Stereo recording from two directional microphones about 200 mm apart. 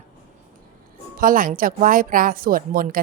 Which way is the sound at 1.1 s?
45° right (ahead or behind).